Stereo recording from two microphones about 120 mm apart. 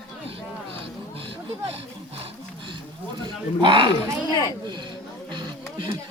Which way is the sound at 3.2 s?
40° right (ahead or behind).